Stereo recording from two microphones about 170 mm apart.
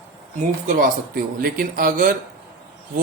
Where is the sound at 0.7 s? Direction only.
50° right (ahead or behind).